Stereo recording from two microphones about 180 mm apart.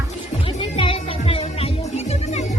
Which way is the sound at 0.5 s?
30° left (ahead or behind).